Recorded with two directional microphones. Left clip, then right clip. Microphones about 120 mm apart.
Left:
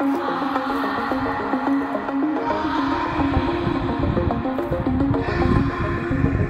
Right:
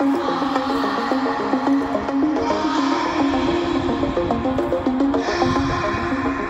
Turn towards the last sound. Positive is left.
turn(degrees=-35)  # may be behind; listen again after turning